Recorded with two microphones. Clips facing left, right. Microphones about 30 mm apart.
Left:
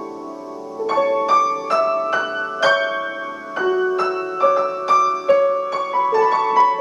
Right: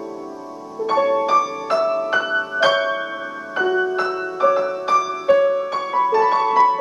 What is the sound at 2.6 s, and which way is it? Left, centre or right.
Music, right.